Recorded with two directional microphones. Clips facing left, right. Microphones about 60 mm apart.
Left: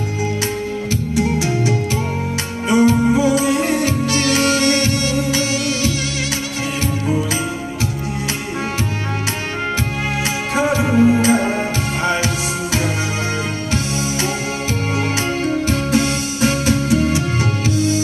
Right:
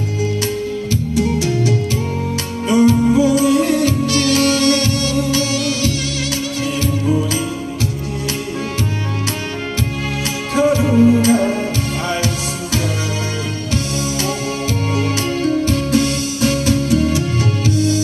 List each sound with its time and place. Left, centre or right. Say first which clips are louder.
2.7 s music: right 1 dB; left
10.5 s music: right 3 dB; left
15.1 s music: right 2 dB; left